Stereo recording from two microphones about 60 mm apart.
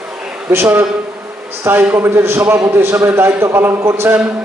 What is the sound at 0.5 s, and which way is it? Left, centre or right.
A man's voice, right.